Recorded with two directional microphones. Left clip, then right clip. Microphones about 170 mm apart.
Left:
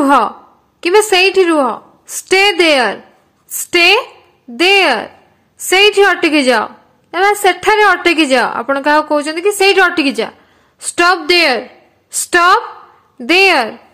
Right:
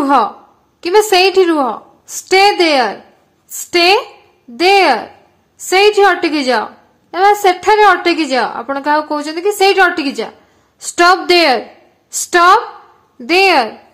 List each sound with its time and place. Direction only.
0.0 s a woman's voice: 20° left (ahead or behind)
1.1 s a woman's voice: 5° left (ahead or behind)
2.0 s a woman's voice: 15° left (ahead or behind)
10.8 s a woman's voice: 5° left (ahead or behind)
12.1 s a woman's voice: 10° left (ahead or behind)